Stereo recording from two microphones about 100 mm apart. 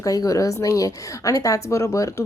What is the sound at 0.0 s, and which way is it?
A woman's voice, 35° left (ahead or behind).